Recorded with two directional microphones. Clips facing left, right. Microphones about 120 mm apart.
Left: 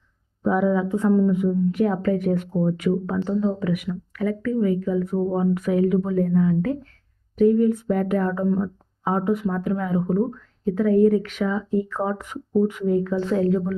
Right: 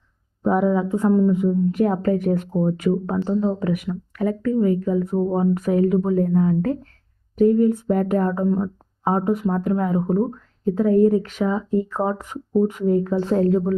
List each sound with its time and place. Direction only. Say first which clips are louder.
0.4 s speech: right 1 dB; 40° right (ahead or behind)
0.9 s speech: right 1 dB; 25° right (ahead or behind)